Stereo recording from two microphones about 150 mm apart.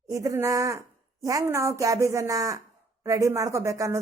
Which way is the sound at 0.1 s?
20° right (ahead or behind).